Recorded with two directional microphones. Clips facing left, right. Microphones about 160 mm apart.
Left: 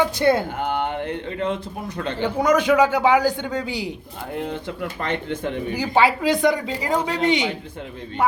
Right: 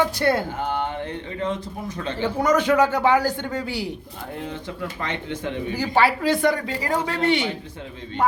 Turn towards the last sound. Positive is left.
turn(degrees=15)  # may be behind; listen again after turning